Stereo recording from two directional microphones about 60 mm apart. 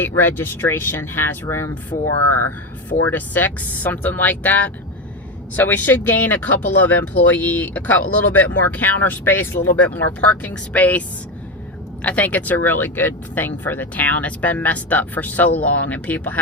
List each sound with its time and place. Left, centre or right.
0.0 s speech: left
3.1 s speech: left
12.0 s speech: left